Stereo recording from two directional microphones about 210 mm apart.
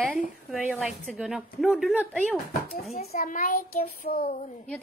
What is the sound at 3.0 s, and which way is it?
A child's voice, 45° left (ahead or behind).